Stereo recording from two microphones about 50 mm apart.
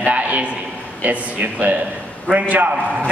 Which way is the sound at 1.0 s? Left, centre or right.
Right.